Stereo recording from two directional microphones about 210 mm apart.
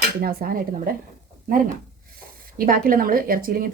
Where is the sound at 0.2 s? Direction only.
45° right (ahead or behind).